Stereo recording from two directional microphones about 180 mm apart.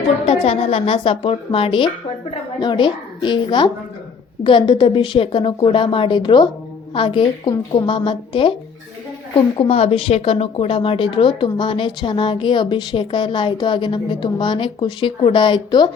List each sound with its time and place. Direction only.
0.3 s speech: 35° left (ahead or behind)